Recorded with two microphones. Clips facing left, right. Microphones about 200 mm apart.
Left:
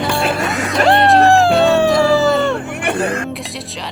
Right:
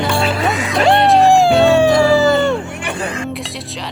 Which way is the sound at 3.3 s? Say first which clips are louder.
Right 1 dB; centre (ahead or behind).